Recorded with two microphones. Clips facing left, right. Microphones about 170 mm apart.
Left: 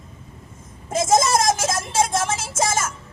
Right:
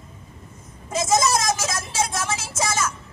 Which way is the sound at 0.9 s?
50° left (ahead or behind).